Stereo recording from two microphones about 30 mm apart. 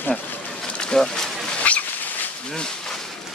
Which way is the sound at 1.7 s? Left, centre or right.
Left.